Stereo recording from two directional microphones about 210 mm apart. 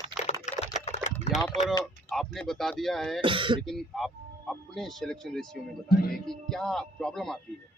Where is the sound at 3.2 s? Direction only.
25° right (ahead or behind).